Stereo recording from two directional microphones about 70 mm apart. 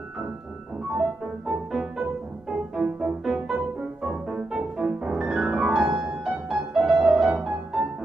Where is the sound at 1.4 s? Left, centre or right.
Centre.